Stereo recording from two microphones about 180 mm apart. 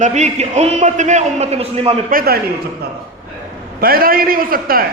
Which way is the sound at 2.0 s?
55° right (ahead or behind).